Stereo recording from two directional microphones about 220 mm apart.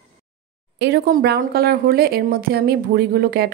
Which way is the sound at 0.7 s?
50° right (ahead or behind).